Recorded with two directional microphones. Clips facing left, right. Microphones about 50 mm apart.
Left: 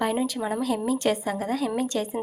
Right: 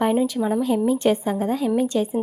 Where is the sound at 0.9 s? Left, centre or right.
Centre.